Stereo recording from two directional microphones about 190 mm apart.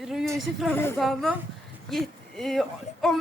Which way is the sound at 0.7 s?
10° left (ahead or behind).